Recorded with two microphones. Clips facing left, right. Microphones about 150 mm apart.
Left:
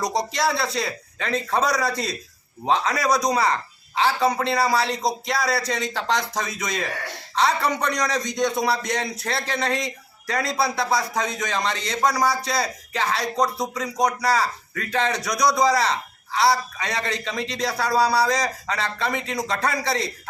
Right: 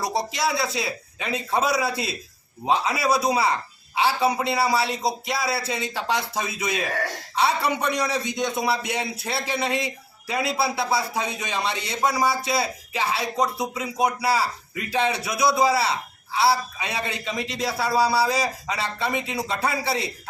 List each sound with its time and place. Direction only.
0.3 s a man's voice: centre (ahead or behind)